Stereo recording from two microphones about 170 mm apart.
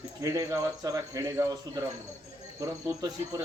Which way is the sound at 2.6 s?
20° right (ahead or behind).